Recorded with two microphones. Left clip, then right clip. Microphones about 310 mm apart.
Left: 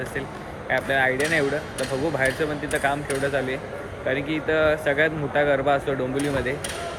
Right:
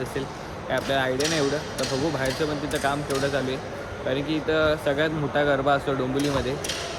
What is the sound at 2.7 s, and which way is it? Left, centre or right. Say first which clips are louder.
Speech: left 3 dB; centre.